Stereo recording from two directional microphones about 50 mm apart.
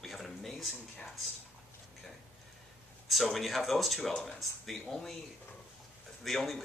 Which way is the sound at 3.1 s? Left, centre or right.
Centre.